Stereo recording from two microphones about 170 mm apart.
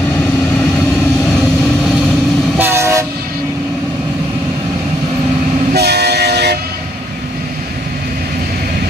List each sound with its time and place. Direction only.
2.5 s train: 15° right (ahead or behind)
5.7 s train: 75° right (ahead or behind)